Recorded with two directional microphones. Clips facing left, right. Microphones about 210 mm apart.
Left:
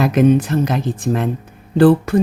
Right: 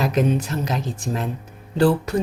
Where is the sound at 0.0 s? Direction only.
55° left (ahead or behind).